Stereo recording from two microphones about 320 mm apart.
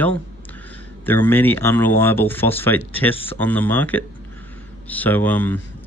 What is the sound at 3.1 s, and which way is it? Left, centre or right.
Speech, centre.